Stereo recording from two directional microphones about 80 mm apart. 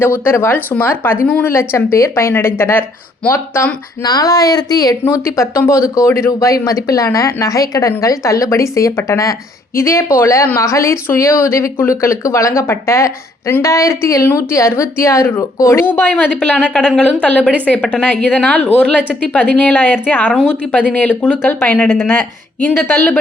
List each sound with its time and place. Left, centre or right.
0.0 s speech: left
1.5 s speech: left
4.0 s speech: left
5.2 s speech: left
15.8 s speech: centre
20.3 s speech: centre
21.8 s speech: centre